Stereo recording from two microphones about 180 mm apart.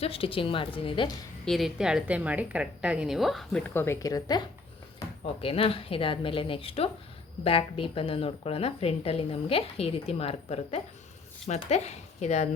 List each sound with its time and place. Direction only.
0.0 s a woman's voice: 30° left (ahead or behind)
1.5 s a woman's voice: centre (ahead or behind); by 4.4 s 20° left (ahead or behind)
5.2 s a woman's voice: 30° left (ahead or behind)